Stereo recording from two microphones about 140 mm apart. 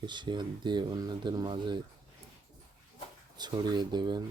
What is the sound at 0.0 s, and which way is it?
Speech, 35° right (ahead or behind).